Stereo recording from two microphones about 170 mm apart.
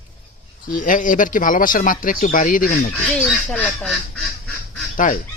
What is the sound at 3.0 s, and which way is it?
Speech, 5° left (ahead or behind).